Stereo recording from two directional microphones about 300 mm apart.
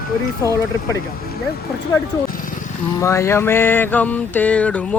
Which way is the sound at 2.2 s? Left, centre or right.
Left.